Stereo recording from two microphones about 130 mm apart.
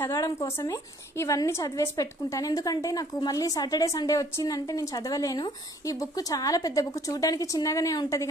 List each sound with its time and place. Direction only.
0.0 s a woman's voice: 25° left (ahead or behind)